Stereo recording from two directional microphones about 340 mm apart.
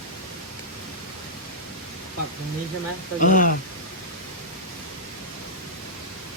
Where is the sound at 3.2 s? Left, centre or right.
Left.